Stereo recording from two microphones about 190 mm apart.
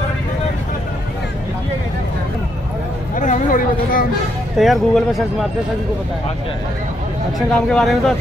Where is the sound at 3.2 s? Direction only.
45° left (ahead or behind).